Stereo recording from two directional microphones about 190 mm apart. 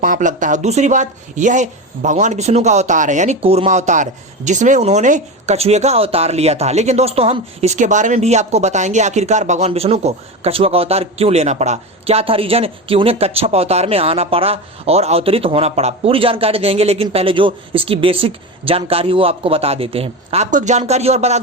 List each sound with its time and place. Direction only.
0.0 s speech: 45° right (ahead or behind)